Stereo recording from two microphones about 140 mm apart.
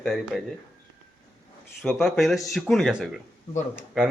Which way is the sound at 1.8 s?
Centre (ahead or behind).